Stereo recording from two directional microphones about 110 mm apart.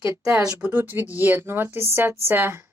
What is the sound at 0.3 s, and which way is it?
Speech, 10° right (ahead or behind).